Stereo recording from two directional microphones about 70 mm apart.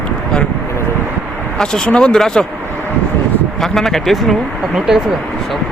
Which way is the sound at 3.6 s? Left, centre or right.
Centre.